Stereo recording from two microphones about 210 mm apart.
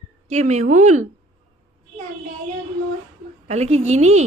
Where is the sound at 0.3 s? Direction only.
35° right (ahead or behind).